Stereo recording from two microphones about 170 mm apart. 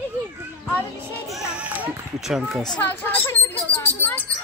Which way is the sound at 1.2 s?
5° right (ahead or behind).